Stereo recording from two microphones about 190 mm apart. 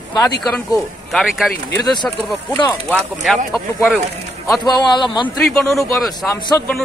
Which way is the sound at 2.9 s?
5° right (ahead or behind).